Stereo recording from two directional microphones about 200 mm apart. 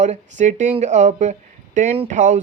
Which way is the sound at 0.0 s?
35° right (ahead or behind).